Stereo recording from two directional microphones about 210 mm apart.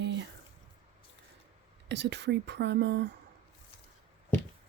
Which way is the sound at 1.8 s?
55° right (ahead or behind).